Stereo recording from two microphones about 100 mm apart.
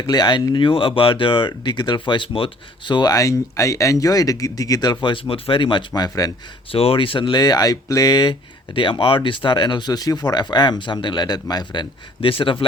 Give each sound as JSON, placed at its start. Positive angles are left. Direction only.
{"t": 0.0, "sound": "speech", "side_deg": 45}
{"t": 0.5, "sound": "speech", "side_deg": 60}
{"t": 5.3, "sound": "speech", "side_deg": 60}
{"t": 5.9, "sound": "speech", "side_deg": 40}
{"t": 6.7, "sound": "speech", "side_deg": 70}